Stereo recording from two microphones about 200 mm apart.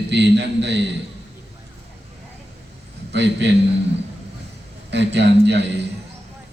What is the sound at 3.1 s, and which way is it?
Speech, 60° right (ahead or behind).